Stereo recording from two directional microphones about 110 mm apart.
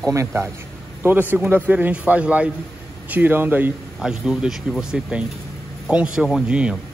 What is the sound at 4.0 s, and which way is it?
A man's voice, 5° right (ahead or behind).